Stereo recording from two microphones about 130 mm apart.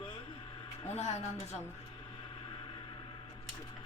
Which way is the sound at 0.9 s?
55° left (ahead or behind).